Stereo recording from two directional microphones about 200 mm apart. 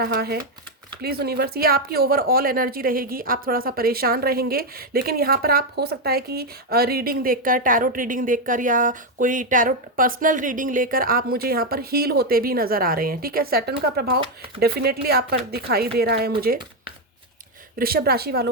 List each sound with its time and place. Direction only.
0.0 s speech: 50° right (ahead or behind)
17.7 s speech: 50° right (ahead or behind)